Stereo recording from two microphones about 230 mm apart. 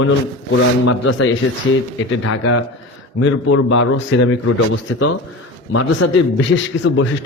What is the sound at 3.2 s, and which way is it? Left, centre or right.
Speech, left.